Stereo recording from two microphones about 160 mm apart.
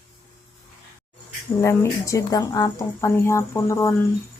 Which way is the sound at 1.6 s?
15° left (ahead or behind).